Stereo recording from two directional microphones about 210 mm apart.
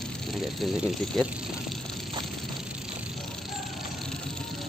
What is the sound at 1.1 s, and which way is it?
Speech, centre (ahead or behind).